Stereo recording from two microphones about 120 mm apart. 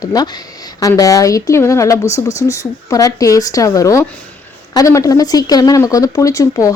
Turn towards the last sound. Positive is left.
turn(degrees=30)  # may be behind; listen again after turning